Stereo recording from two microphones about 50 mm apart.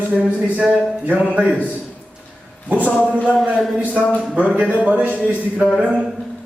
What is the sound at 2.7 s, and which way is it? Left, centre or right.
Speech, right.